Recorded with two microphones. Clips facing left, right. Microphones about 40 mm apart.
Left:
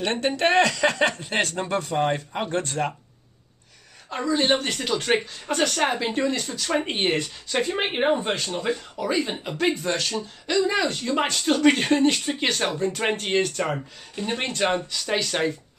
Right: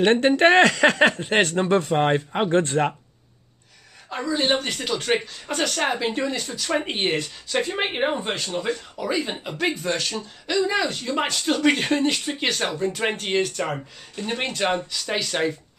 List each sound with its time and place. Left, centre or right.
0.0 s speech: right
4.1 s speech: centre